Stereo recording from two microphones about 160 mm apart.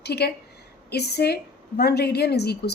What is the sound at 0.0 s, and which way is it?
A woman's voice, 90° left.